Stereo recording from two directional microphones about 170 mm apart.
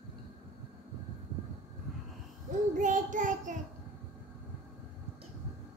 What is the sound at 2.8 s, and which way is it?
Child singing, 50° right (ahead or behind).